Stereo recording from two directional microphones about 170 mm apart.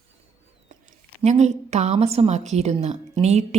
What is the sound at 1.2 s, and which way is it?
A woman's voice, 40° right (ahead or behind).